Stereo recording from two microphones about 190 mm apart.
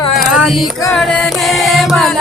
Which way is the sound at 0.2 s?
Centre (ahead or behind).